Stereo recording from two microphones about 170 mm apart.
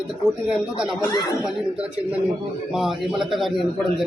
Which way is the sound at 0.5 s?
5° right (ahead or behind).